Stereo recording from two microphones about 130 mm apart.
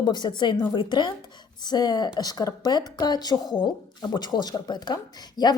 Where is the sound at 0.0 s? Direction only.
35° left (ahead or behind).